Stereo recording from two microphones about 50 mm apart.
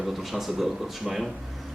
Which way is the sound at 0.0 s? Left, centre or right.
Centre.